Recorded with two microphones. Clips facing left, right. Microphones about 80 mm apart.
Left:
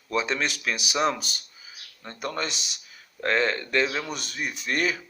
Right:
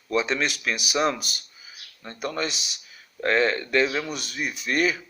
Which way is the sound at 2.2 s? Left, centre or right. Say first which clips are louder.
Right 2 dB; left.